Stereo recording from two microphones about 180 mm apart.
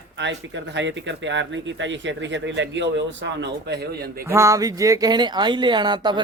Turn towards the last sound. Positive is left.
turn(degrees=-25)  # may be behind; listen again after turning